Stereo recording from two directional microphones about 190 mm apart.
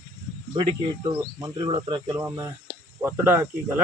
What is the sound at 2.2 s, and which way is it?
Speech, 10° right (ahead or behind).